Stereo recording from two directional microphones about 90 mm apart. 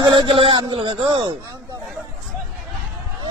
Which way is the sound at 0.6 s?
90° right.